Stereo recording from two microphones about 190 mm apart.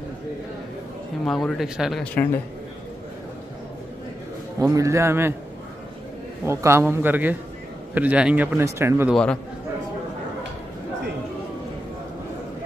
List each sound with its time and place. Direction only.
1.2 s speech: centre (ahead or behind)
4.6 s speech: 15° right (ahead or behind)
6.4 s speech: 15° right (ahead or behind)
9.1 s speech: 5° left (ahead or behind)